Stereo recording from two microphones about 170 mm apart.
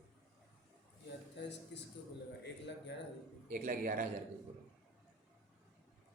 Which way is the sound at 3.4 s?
50° right (ahead or behind).